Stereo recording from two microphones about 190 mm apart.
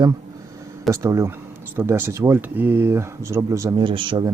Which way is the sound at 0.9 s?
15° right (ahead or behind).